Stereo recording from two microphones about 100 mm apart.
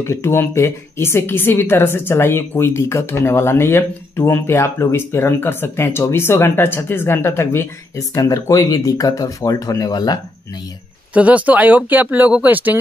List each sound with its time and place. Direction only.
0.0 s speech: 25° left (ahead or behind); by 10.1 s 40° left (ahead or behind)
11.1 s speech: 15° right (ahead or behind)